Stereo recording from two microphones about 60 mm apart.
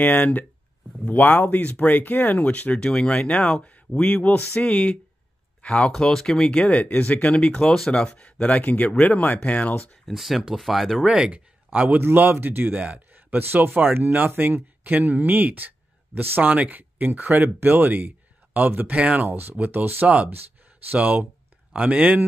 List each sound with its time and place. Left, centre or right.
0.0 s speech: left
7.6 s speech: centre; by 9.9 s left
10.0 s speech: centre
11.1 s speech: centre
12.0 s speech: right
19.2 s speech: right
20.1 s speech: right